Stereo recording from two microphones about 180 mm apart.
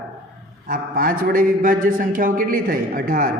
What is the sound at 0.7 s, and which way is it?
A man's voice, 55° right (ahead or behind).